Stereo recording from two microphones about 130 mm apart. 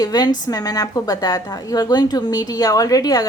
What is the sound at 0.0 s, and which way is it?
A woman's voice, 30° left (ahead or behind).